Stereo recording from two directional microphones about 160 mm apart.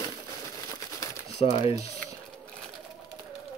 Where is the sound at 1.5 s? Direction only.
35° left (ahead or behind).